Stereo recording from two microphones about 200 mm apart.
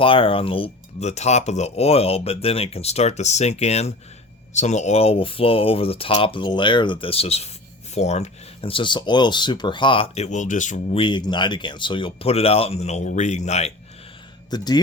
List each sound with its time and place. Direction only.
0.0 s speech: 25° left (ahead or behind)
11.0 s speech: 25° left (ahead or behind)
14.5 s speech: 20° left (ahead or behind)